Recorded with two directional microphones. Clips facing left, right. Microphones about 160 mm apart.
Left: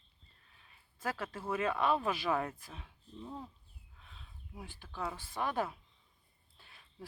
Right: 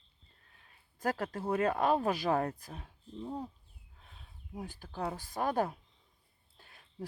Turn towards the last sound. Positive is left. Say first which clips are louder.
# right 7 dB
turn(degrees=-45)  # may be behind; listen again after turning